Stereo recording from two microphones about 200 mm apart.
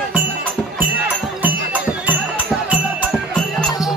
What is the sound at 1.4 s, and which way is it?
Music, 10° right (ahead or behind).